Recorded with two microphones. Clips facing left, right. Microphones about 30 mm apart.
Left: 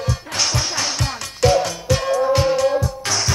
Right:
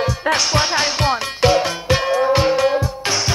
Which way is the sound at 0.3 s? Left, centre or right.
Right.